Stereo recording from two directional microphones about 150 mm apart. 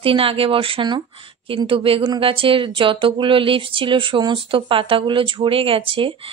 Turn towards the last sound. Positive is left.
turn(degrees=-35)  # may be behind; listen again after turning